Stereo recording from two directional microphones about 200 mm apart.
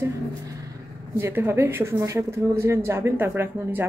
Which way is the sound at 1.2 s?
10° right (ahead or behind).